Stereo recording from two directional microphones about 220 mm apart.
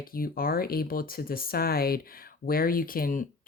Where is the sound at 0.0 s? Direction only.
40° left (ahead or behind).